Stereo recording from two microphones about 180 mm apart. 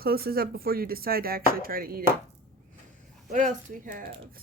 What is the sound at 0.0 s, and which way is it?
Speech, 55° right (ahead or behind).